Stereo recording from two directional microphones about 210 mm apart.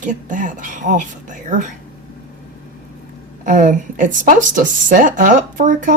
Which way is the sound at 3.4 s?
40° right (ahead or behind).